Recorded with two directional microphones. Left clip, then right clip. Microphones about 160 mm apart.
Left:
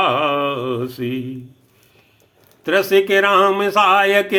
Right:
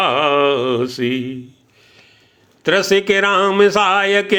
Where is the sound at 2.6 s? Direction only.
30° right (ahead or behind).